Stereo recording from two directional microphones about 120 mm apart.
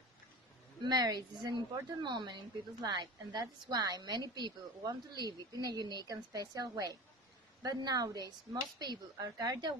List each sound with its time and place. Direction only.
0.8 s a woman's voice: 35° right (ahead or behind)